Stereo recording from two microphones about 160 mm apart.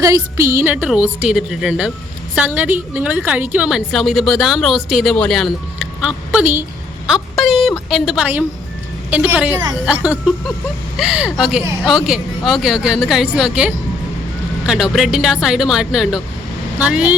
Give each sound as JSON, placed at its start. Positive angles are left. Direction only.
{"t": 0.0, "sound": "a woman's voice", "side_deg": -20}
{"t": 7.1, "sound": "a woman's voice", "side_deg": 0}